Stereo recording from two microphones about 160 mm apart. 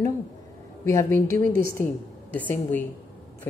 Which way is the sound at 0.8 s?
15° left (ahead or behind).